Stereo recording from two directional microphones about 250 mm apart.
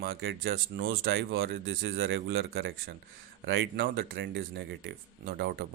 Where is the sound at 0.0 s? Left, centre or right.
Right.